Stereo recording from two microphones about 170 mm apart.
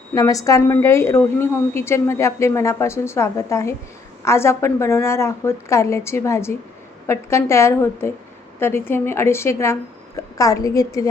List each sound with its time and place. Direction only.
0.1 s a woman's voice: 20° left (ahead or behind)